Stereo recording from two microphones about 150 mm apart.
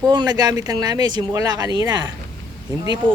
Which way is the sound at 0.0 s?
25° right (ahead or behind).